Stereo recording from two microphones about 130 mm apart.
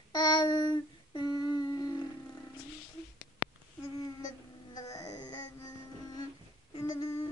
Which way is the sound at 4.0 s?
30° left (ahead or behind).